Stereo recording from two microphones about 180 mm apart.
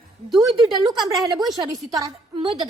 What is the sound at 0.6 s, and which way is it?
A woman's voice, 20° right (ahead or behind).